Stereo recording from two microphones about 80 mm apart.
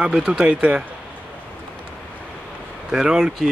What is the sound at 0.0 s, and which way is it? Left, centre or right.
Speech, centre.